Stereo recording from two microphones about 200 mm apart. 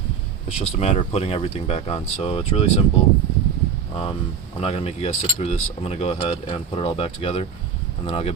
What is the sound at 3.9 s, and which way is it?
Speech, 30° left (ahead or behind).